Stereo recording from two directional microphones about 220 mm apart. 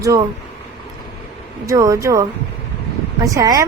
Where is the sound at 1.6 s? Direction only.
15° right (ahead or behind).